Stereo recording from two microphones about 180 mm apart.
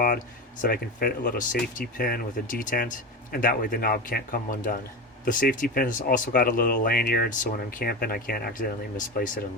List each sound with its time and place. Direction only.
0.6 s speech: 55° left (ahead or behind)